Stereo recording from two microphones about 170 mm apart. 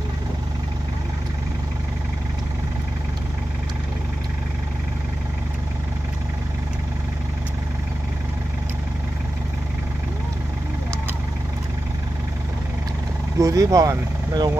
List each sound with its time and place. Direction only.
13.4 s speech: 20° right (ahead or behind)